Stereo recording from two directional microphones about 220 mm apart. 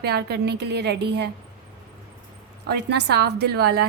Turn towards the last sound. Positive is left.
turn(degrees=-45)  # may be behind; listen again after turning